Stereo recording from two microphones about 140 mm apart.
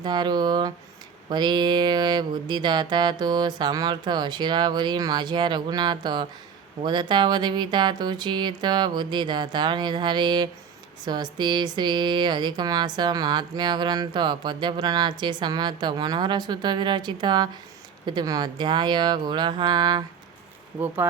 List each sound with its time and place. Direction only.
0.0 s speech: 30° right (ahead or behind)
20.8 s speech: 15° right (ahead or behind)